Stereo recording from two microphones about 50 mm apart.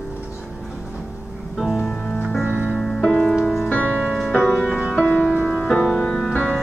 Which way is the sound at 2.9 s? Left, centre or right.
Left.